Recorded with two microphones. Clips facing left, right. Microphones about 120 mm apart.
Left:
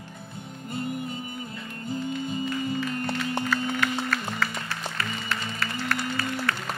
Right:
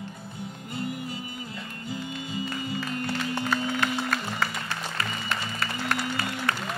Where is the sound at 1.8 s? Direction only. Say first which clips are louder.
Left 6 dB; 45° left (ahead or behind).